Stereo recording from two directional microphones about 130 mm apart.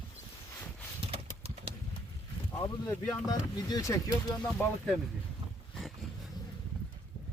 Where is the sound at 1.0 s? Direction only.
45° right (ahead or behind).